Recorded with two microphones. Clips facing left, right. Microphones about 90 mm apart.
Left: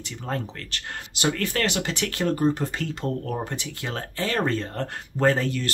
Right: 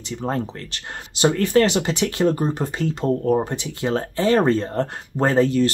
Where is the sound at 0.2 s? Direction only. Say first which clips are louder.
Right 5 dB; 25° right (ahead or behind).